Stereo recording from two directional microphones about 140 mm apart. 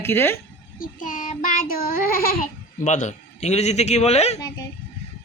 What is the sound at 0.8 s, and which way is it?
Child singing, 70° left (ahead or behind).